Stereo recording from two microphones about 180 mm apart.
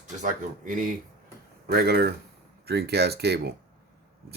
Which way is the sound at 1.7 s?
60° right (ahead or behind).